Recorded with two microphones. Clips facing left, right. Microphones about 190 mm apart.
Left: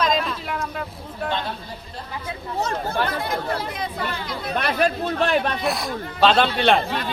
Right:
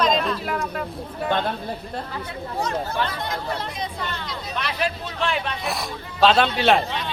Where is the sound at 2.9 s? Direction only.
55° left (ahead or behind).